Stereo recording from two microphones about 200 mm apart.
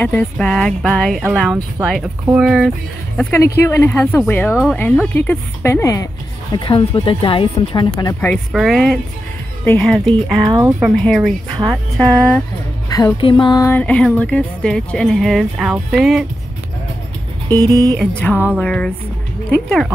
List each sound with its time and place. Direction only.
0.0 s music: 5° left (ahead or behind)
3.2 s speech: 10° left (ahead or behind)
8.0 s speech: 15° left (ahead or behind)
8.5 s music: centre (ahead or behind)
12.9 s music: 20° left (ahead or behind); by 16.3 s centre (ahead or behind)
17.5 s speech: 20° right (ahead or behind)
18.5 s music: 5° left (ahead or behind)